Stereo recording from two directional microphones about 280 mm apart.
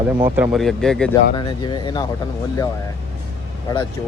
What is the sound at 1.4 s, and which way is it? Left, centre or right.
Speech, centre.